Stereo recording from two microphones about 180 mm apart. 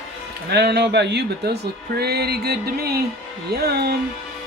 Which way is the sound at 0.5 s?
65° right (ahead or behind).